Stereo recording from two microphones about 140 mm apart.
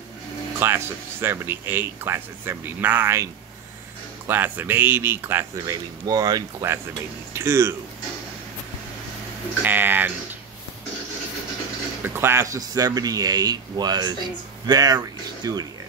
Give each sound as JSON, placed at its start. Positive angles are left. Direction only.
{"t": 0.6, "sound": "speech", "side_deg": -15}
{"t": 4.3, "sound": "speech", "side_deg": -15}
{"t": 9.6, "sound": "speech", "side_deg": -15}
{"t": 12.1, "sound": "a man's voice", "side_deg": -15}